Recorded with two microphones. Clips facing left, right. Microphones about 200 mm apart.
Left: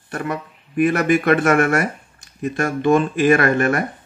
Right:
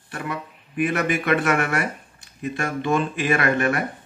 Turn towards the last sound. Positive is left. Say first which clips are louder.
# left 5 dB
turn(degrees=45)  # may be behind; listen again after turning